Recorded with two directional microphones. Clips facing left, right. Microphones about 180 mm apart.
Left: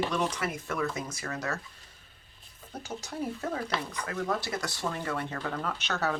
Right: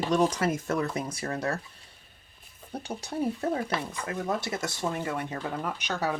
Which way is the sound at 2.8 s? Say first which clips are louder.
Right 5 dB; 30° right (ahead or behind).